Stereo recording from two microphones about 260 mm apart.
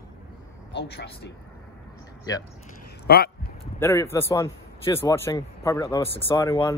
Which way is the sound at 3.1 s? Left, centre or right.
Left.